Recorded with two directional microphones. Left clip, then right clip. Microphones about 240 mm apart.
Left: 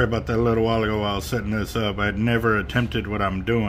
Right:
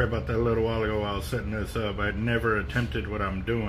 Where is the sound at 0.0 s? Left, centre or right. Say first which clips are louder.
Left 5 dB; left.